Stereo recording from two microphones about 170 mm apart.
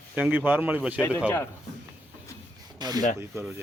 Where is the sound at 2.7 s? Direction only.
25° right (ahead or behind).